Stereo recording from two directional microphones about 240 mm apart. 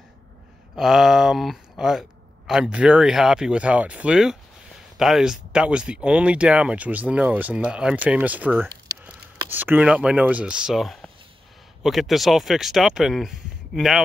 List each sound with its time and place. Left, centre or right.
0.7 s speech: centre